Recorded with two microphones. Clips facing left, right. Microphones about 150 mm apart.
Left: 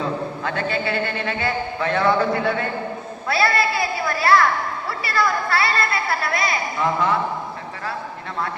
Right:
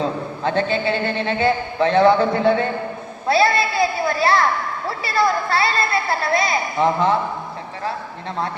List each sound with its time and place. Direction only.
0.4 s a man's voice: 25° right (ahead or behind)